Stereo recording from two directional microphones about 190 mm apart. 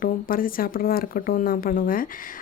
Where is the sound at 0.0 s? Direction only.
50° left (ahead or behind).